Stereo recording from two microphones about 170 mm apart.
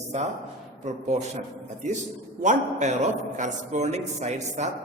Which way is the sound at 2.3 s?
45° right (ahead or behind).